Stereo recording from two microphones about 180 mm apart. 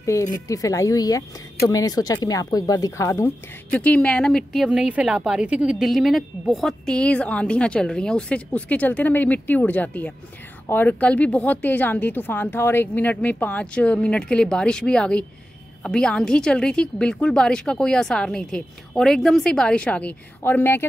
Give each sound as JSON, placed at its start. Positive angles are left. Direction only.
{"t": 0.0, "sound": "a woman's voice", "side_deg": 15}